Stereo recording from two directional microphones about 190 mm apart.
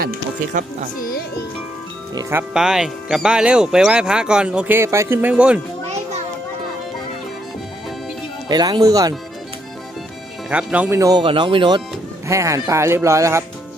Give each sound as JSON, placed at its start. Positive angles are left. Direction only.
{"t": 0.0, "sound": "speech", "side_deg": -45}
{"t": 2.5, "sound": "speech", "side_deg": -5}
{"t": 8.4, "sound": "speech", "side_deg": -20}
{"t": 10.5, "sound": "speech", "side_deg": -5}